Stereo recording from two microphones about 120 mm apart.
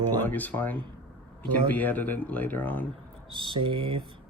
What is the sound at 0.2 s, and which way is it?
Speech, 15° left (ahead or behind).